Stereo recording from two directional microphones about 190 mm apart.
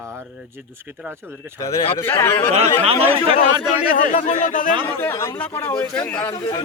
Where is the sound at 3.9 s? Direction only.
40° left (ahead or behind).